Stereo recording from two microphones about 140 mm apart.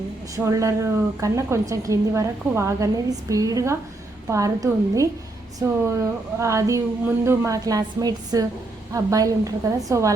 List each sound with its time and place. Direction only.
0.3 s a woman's voice: 20° right (ahead or behind)